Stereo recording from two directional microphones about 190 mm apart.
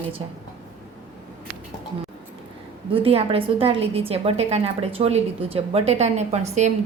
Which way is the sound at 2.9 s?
30° right (ahead or behind).